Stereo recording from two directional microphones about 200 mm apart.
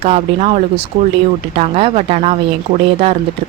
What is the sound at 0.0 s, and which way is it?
Speech, 30° right (ahead or behind).